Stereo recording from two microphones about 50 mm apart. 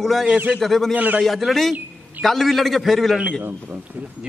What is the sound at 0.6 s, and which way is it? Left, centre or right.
Speech, centre.